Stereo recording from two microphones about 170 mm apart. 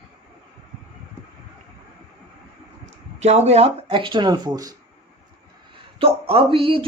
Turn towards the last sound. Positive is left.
turn(degrees=-30)  # may be behind; listen again after turning